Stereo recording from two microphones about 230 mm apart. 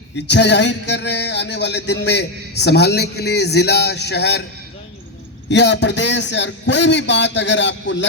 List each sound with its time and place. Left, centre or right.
0.3 s music: left
5.5 s music: left